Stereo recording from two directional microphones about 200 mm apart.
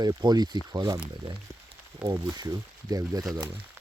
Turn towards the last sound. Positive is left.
turn(degrees=-10)  # may be behind; listen again after turning